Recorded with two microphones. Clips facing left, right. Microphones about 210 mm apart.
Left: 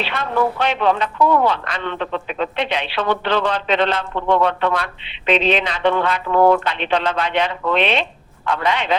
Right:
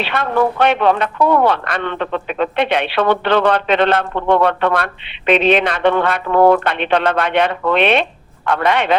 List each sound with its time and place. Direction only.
0.0 s speech: 60° right (ahead or behind)